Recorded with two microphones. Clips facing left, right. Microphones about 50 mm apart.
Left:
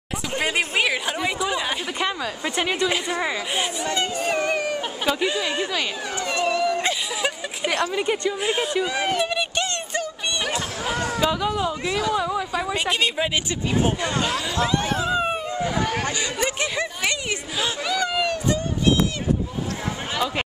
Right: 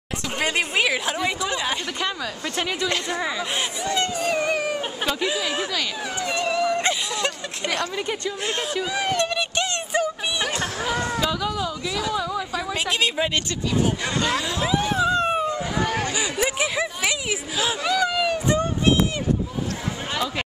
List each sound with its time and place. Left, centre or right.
0.4 s speech: centre
2.0 s a woman's voice: centre
4.4 s speech: centre
5.7 s speech: centre
6.2 s a sound: centre
7.9 s a woman's voice: centre
11.1 s a woman's voice: centre
12.7 s speech: centre
14.3 s speech: centre
15.0 s a sound: centre
15.7 s speech: centre
16.1 s speech: centre
18.5 s a sound: right